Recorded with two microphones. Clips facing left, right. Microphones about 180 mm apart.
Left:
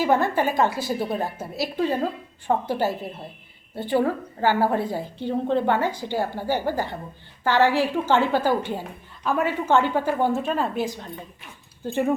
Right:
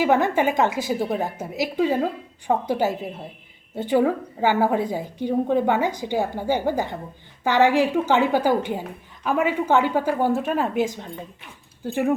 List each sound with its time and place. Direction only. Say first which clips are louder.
0.0 s a woman's voice: right 2 dB; 15° right (ahead or behind)